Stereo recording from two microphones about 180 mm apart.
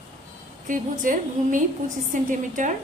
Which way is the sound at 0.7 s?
45° right (ahead or behind).